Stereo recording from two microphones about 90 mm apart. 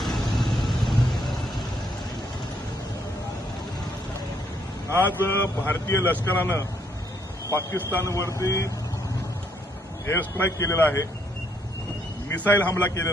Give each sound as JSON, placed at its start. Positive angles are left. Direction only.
{"t": 0.0, "sound": "vehicle", "side_deg": 0}
{"t": 4.9, "sound": "a man's voice", "side_deg": 25}
{"t": 7.9, "sound": "speech", "side_deg": 35}
{"t": 10.1, "sound": "a man's voice", "side_deg": 25}
{"t": 12.3, "sound": "a man's voice", "side_deg": 15}
{"t": 12.5, "sound": "speech", "side_deg": 35}